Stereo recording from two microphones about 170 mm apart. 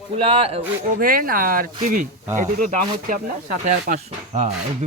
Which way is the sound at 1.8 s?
50° right (ahead or behind).